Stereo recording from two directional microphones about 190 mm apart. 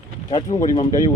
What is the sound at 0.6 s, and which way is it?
Speech, 30° left (ahead or behind).